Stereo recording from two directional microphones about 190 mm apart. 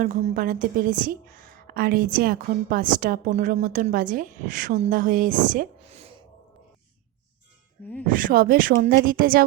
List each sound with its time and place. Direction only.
0.0 s a woman's voice: 50° right (ahead or behind)
8.0 s a woman's voice: 45° right (ahead or behind)